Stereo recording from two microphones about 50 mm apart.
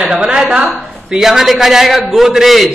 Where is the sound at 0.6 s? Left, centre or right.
Centre.